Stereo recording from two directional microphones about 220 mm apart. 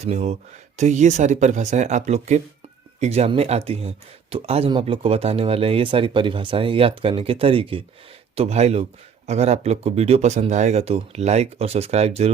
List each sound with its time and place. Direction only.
0.0 s speech: 30° right (ahead or behind)